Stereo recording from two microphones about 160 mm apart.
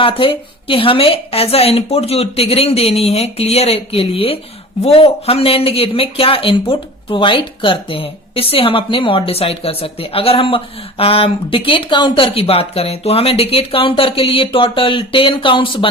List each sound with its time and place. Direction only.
0.0 s speech: 35° left (ahead or behind)